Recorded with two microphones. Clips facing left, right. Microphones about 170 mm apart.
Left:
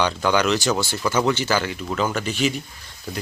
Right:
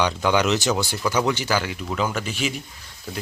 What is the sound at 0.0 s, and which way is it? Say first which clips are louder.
Speech: even; 15° right (ahead or behind).